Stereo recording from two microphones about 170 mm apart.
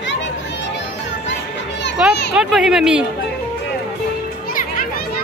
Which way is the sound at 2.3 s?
5° right (ahead or behind).